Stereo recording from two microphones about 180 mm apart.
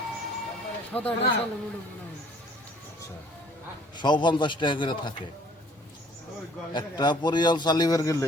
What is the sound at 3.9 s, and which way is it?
A man's voice, 25° left (ahead or behind).